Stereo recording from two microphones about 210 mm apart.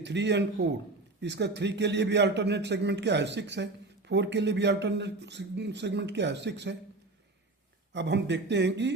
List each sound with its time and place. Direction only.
0.0 s a man's voice: 55° right (ahead or behind)
7.9 s a man's voice: 55° right (ahead or behind)